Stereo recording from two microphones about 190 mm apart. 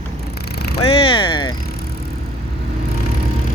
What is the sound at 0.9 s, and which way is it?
Vehicle, 30° left (ahead or behind).